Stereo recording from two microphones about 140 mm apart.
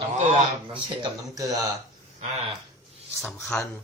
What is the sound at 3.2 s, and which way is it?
Speech, 10° left (ahead or behind).